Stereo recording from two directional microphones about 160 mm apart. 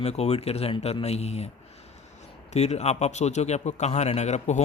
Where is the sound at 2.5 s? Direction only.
45° left (ahead or behind).